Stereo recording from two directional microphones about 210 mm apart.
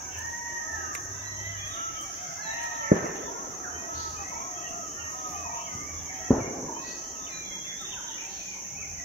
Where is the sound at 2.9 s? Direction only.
40° right (ahead or behind).